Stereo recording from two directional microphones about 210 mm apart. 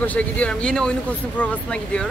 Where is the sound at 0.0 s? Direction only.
5° left (ahead or behind).